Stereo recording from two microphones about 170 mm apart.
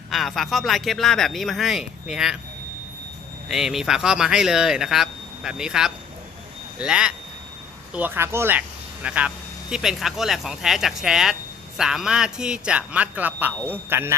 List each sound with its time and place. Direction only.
0.1 s speech: centre (ahead or behind)
3.5 s speech: centre (ahead or behind)